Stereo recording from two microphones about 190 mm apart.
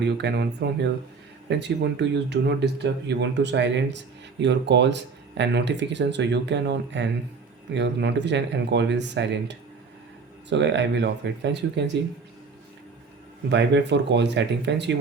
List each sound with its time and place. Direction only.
0.0 s speech: 65° right (ahead or behind)
13.5 s speech: 65° right (ahead or behind)